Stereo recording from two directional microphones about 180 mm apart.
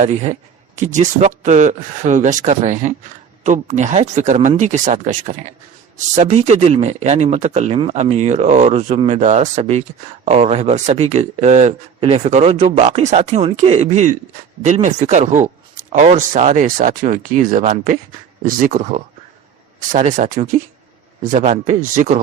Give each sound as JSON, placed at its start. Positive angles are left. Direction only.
{"t": 0.0, "sound": "speech", "side_deg": -40}